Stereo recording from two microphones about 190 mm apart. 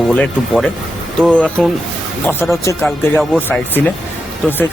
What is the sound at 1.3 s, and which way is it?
Speech, 5° left (ahead or behind).